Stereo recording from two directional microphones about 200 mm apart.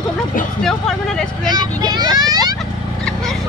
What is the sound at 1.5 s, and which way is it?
Vehicle, 20° right (ahead or behind).